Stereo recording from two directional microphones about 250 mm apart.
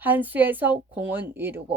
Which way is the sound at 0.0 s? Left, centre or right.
Centre.